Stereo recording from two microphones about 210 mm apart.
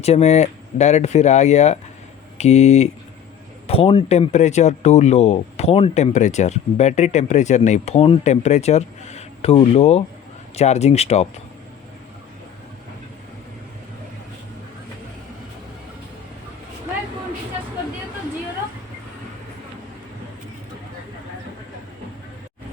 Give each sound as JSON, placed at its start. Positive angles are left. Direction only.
{"t": 0.0, "sound": "speech", "side_deg": 30}